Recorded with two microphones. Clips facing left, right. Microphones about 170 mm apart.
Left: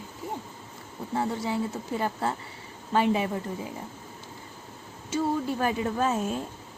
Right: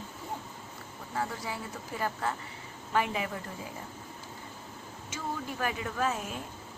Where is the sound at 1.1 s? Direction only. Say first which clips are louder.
Left 7 dB; 25° left (ahead or behind).